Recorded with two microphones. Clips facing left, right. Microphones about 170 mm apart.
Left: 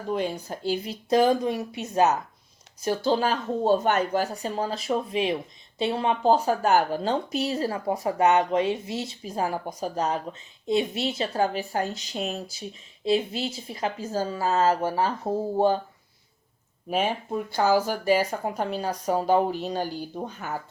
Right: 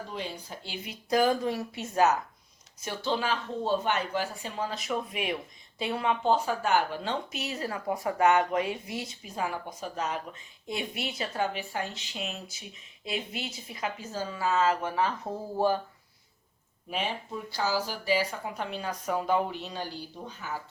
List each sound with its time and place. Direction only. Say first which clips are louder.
0.1 s speech: left 9 dB; 50° left (ahead or behind)
1.1 s speech: left 4 dB; 20° left (ahead or behind)
2.8 s speech: left 7 dB; 40° left (ahead or behind)
16.9 s speech: left 7 dB; 45° left (ahead or behind)